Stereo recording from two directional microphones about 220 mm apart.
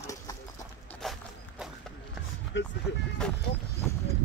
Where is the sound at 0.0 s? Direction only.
15° left (ahead or behind).